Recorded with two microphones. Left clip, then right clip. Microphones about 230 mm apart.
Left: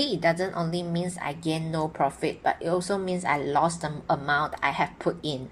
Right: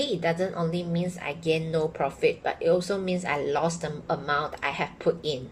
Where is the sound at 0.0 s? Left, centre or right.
Left.